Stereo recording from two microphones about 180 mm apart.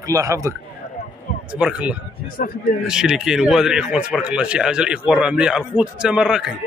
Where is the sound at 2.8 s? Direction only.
5° right (ahead or behind).